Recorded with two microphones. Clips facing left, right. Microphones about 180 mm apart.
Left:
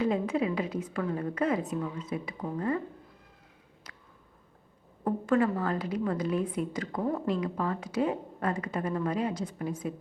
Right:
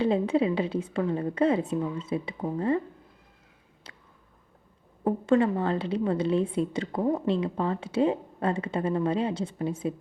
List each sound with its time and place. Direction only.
0.0 s a woman's voice: 30° right (ahead or behind)
3.9 s a sound: 30° right (ahead or behind)
5.0 s a woman's voice: 25° right (ahead or behind)